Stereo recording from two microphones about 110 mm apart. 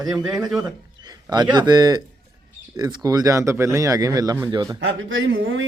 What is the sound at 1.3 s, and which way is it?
Speech, 40° right (ahead or behind).